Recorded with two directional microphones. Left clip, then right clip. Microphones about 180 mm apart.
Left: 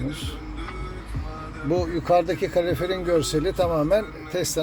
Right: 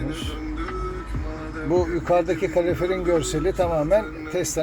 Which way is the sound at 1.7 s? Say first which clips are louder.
Even; 20° left (ahead or behind).